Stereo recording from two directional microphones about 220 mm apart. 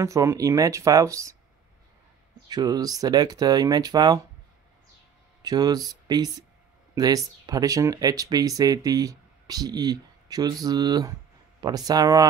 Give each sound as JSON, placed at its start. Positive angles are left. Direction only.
{"t": 0.0, "sound": "speech", "side_deg": -15}
{"t": 2.4, "sound": "speech", "side_deg": -15}
{"t": 5.4, "sound": "speech", "side_deg": -20}
{"t": 7.4, "sound": "speech", "side_deg": -15}